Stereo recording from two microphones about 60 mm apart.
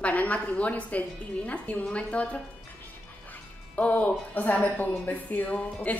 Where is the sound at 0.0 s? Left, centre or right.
Left.